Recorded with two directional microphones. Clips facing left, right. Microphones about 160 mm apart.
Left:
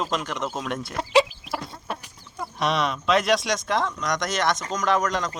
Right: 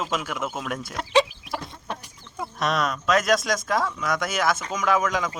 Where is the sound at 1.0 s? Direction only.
5° left (ahead or behind).